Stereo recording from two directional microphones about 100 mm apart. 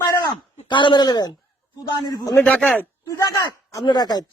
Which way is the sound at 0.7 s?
50° left (ahead or behind).